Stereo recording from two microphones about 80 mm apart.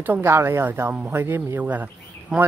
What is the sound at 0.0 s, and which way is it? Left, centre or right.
Speech, right.